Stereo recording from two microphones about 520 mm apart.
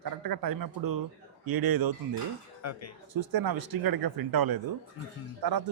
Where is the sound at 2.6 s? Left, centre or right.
Left.